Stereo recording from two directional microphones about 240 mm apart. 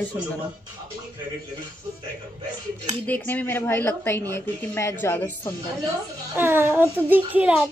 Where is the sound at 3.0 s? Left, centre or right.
Centre.